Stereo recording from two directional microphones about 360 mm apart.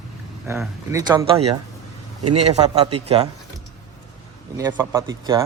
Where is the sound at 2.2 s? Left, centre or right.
Right.